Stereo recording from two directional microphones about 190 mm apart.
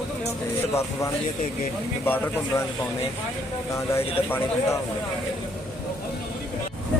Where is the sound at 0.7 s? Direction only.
15° left (ahead or behind).